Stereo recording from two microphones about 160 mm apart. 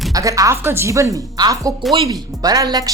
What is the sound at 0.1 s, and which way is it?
Speech, 20° right (ahead or behind).